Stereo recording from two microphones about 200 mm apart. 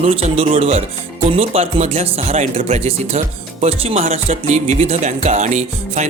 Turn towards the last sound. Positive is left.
turn(degrees=-35)  # may be behind; listen again after turning